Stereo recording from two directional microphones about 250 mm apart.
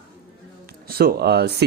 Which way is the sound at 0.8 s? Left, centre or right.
Right.